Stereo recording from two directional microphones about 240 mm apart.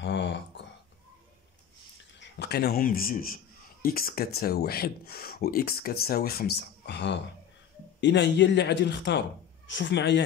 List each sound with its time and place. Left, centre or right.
0.0 s speech: left
2.1 s speech: left